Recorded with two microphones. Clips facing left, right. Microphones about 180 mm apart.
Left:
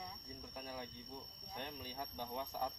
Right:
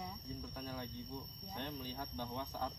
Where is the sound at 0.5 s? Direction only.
10° left (ahead or behind).